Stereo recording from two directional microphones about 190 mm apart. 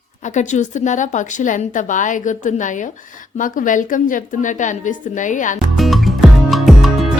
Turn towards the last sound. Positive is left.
turn(degrees=0)  # may be behind; listen again after turning